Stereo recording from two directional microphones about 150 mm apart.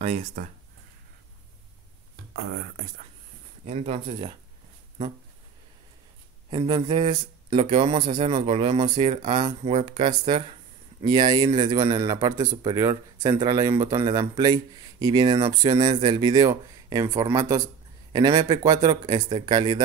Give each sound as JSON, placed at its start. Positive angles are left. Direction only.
{"t": 0.0, "sound": "speech", "side_deg": -50}
{"t": 3.6, "sound": "speech", "side_deg": -45}
{"t": 6.5, "sound": "speech", "side_deg": -30}